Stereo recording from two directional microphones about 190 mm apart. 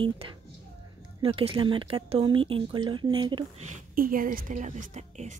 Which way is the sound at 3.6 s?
45° right (ahead or behind).